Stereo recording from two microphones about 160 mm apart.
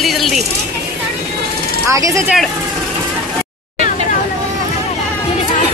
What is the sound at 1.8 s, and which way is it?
Speech, 20° right (ahead or behind).